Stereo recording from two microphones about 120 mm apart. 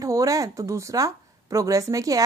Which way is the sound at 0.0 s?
30° right (ahead or behind).